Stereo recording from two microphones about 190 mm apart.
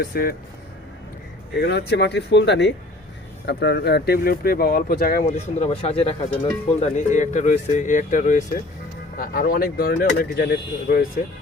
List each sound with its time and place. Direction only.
0.0 s speech: 50° left (ahead or behind)
1.5 s speech: 65° left (ahead or behind)
5.2 s speech: 35° left (ahead or behind); by 11.0 s 50° left (ahead or behind)